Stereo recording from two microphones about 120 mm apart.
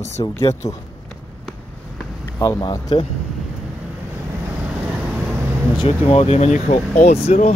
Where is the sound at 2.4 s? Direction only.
30° left (ahead or behind).